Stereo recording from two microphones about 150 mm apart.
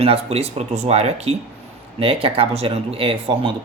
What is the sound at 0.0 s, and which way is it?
Speech, 40° right (ahead or behind).